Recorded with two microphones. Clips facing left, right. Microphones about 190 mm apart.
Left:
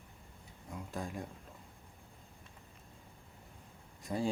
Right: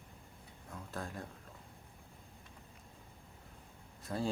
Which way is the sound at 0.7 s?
15° left (ahead or behind).